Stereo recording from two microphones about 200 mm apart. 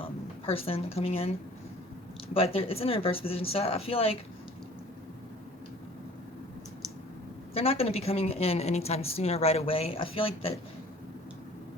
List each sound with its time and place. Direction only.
0.0 s speech: 30° left (ahead or behind)
2.3 s speech: 30° left (ahead or behind)
7.5 s speech: 30° left (ahead or behind)